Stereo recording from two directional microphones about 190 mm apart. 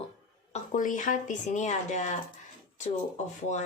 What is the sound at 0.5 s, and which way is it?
Speech, 45° left (ahead or behind).